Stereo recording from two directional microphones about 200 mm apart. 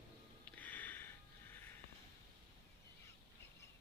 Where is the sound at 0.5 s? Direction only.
10° left (ahead or behind).